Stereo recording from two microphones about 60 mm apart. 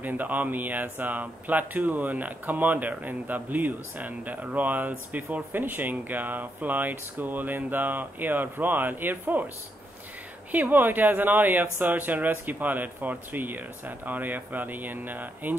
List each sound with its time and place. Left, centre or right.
0.0 s speech: right
10.5 s speech: right